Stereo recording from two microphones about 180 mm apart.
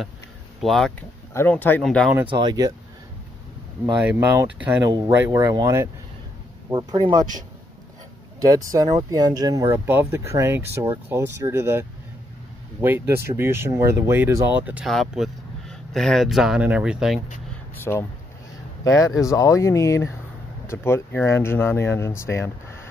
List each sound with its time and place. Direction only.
0.6 s speech: centre (ahead or behind)
1.3 s speech: 10° left (ahead or behind)
2.2 s speech: 25° right (ahead or behind)
3.9 s speech: 10° right (ahead or behind)
4.8 s speech: 20° right (ahead or behind)
8.4 s speech: 20° right (ahead or behind)
12.8 s speech: 10° right (ahead or behind)
17.9 s speech: 10° left (ahead or behind)